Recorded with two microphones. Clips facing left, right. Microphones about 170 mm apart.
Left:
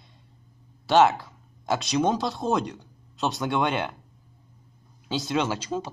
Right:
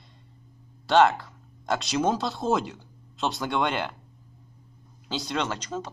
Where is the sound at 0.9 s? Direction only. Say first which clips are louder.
Left 1 dB; centre (ahead or behind).